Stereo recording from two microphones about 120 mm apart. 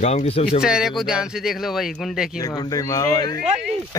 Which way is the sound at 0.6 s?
5° right (ahead or behind).